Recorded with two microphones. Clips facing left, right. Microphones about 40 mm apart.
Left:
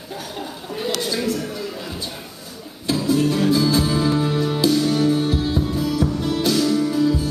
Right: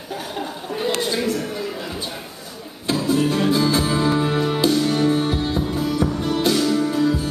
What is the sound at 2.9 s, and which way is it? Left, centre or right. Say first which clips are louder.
Music: even; centre.